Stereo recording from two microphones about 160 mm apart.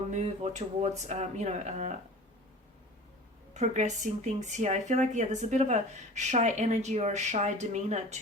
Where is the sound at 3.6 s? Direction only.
45° right (ahead or behind).